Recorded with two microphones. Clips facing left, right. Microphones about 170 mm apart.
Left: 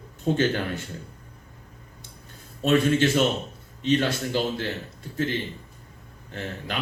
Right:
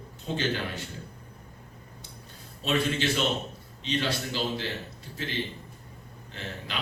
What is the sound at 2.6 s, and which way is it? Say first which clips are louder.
A man's voice: left 7 dB; 50° left (ahead or behind).